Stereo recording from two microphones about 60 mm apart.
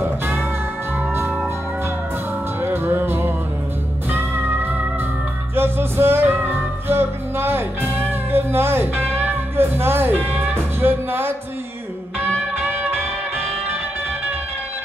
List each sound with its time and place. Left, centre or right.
2.6 s music: right